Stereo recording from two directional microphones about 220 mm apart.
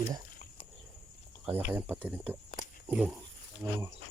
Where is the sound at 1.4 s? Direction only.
10° right (ahead or behind).